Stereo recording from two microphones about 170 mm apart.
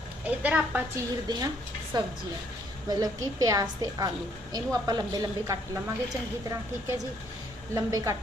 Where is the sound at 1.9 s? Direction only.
25° right (ahead or behind).